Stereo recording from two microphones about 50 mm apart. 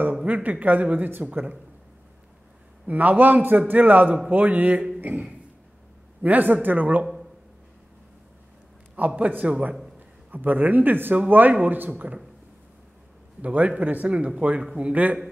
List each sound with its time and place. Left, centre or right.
0.0 s speech: right
2.9 s speech: right
6.2 s speech: right
8.9 s a man's voice: right
13.4 s a man's voice: right